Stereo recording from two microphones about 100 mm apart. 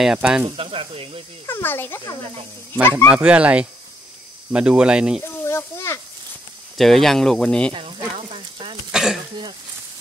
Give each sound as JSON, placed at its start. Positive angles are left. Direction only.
{"t": 0.0, "sound": "speech", "side_deg": -5}
{"t": 0.6, "sound": "speech", "side_deg": -65}
{"t": 1.4, "sound": "speech", "side_deg": 20}
{"t": 3.1, "sound": "speech", "side_deg": -10}
{"t": 5.2, "sound": "speech", "side_deg": 25}
{"t": 6.8, "sound": "speech", "side_deg": 5}
{"t": 7.7, "sound": "sizzle", "side_deg": -60}
{"t": 8.9, "sound": "throat clearing", "side_deg": -5}